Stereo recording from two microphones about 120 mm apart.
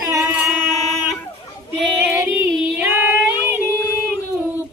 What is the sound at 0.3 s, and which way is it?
Singing, 15° right (ahead or behind).